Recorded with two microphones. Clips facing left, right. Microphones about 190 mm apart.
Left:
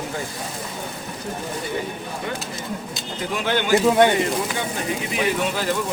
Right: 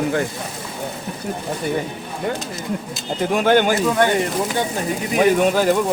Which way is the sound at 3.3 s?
45° right (ahead or behind).